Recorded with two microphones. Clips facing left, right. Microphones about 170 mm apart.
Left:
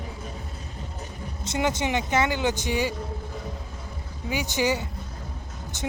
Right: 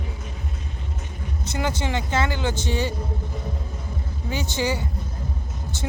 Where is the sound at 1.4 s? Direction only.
20° left (ahead or behind).